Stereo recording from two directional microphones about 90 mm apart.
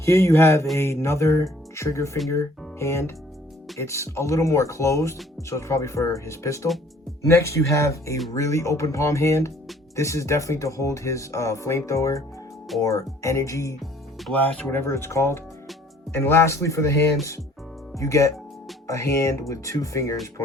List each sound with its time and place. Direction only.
0.0 s speech: 30° left (ahead or behind)
14.2 s speech: 5° left (ahead or behind)
14.6 s speech: 25° left (ahead or behind)